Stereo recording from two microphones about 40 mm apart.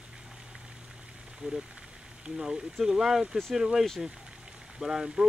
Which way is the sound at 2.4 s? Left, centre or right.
Centre.